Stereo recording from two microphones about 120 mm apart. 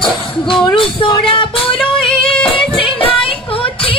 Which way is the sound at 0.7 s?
45° left (ahead or behind).